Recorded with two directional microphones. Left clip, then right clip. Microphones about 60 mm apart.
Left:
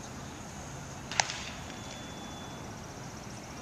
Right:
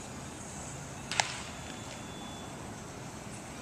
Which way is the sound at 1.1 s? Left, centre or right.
Right.